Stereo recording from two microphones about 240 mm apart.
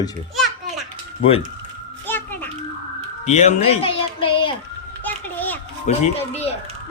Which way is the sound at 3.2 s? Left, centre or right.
Left.